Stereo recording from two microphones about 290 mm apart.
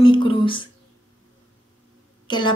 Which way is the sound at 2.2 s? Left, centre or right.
Centre.